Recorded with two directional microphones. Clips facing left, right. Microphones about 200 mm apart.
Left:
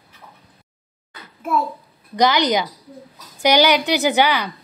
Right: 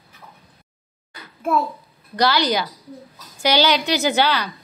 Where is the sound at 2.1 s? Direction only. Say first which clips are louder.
Left 2 dB; 20° left (ahead or behind).